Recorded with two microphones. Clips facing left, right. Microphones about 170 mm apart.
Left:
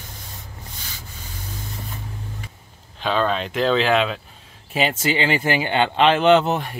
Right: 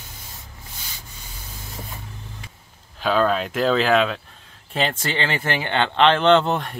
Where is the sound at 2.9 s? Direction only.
5° right (ahead or behind).